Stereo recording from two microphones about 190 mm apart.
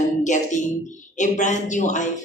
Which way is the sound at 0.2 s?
40° left (ahead or behind).